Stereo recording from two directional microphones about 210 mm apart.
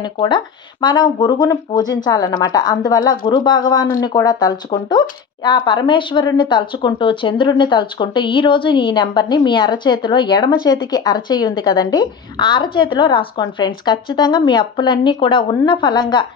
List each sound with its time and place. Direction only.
0.0 s speech: 20° left (ahead or behind)